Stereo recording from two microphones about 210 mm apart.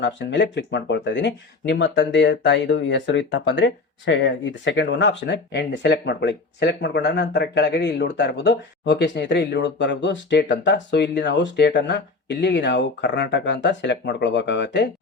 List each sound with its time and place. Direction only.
0.0 s speech: 55° left (ahead or behind)